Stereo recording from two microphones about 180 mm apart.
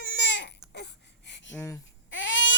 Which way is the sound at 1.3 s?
80° left.